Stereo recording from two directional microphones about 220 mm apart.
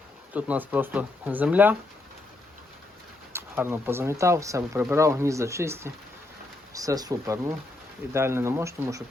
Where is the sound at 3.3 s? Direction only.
10° right (ahead or behind).